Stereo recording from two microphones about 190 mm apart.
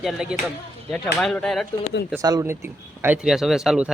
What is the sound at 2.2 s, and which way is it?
Speech, 15° right (ahead or behind).